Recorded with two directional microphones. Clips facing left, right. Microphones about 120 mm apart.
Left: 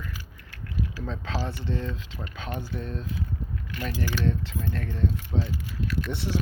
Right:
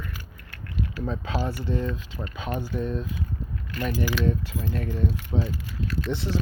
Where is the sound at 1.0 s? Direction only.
10° right (ahead or behind).